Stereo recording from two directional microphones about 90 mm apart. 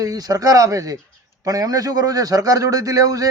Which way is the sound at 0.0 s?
45° right (ahead or behind).